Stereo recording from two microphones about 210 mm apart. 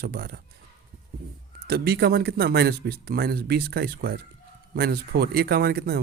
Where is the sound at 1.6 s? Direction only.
50° right (ahead or behind).